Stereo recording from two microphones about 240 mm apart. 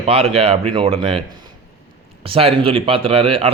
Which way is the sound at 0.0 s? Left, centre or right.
Right.